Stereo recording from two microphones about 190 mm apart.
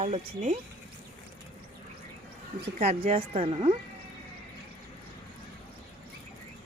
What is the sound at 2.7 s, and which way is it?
Speech, 35° right (ahead or behind).